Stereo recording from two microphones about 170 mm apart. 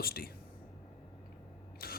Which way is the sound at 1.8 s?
60° left (ahead or behind).